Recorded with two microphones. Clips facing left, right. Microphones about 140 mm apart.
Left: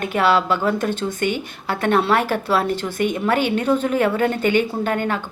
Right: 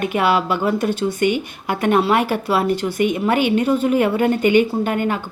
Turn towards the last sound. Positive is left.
turn(degrees=-10)  # may be behind; listen again after turning